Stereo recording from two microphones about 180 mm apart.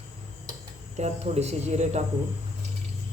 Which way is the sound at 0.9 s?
35° right (ahead or behind).